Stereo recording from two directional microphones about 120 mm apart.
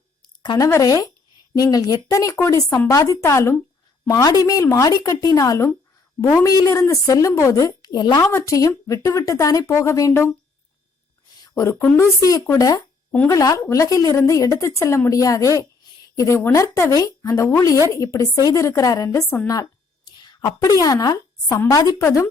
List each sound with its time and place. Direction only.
0.4 s speech: 35° left (ahead or behind)
8.2 s speech: 20° left (ahead or behind)
11.3 s speech: 30° left (ahead or behind)
12.5 s a sound: 30° left (ahead or behind)
13.2 s speech: 30° left (ahead or behind)
20.1 s a sound: 35° left (ahead or behind)
20.8 s a woman's voice: 30° left (ahead or behind)